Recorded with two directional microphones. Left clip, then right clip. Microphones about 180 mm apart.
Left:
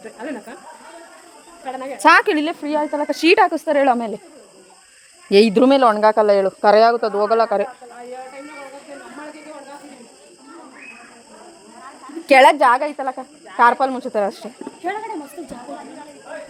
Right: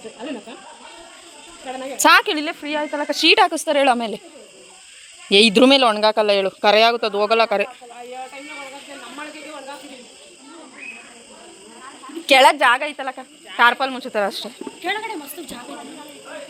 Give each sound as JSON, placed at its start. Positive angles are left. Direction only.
{"t": 0.2, "sound": "speech", "side_deg": -15}
{"t": 2.0, "sound": "a woman's voice", "side_deg": -5}
{"t": 2.2, "sound": "a woman's voice", "side_deg": 15}
{"t": 5.3, "sound": "speech", "side_deg": 15}
{"t": 5.5, "sound": "speech", "side_deg": -10}
{"t": 12.2, "sound": "speech", "side_deg": 10}
{"t": 14.6, "sound": "speech", "side_deg": 30}